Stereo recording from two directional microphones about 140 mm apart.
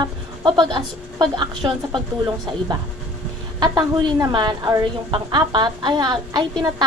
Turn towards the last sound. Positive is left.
turn(degrees=-30)  # may be behind; listen again after turning